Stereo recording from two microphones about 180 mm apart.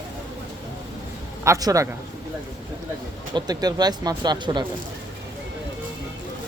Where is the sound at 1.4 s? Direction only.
20° right (ahead or behind).